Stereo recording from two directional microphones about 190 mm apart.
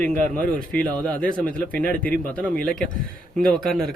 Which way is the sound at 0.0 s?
45° right (ahead or behind).